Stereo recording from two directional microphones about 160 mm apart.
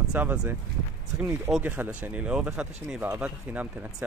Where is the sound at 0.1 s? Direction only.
10° right (ahead or behind).